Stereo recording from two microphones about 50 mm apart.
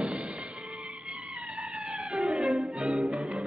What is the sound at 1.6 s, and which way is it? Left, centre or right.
Music, centre.